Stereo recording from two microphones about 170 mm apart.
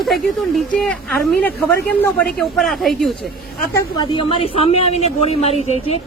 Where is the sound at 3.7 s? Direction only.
30° left (ahead or behind).